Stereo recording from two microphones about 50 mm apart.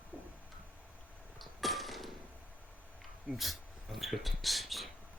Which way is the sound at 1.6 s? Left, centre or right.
Centre.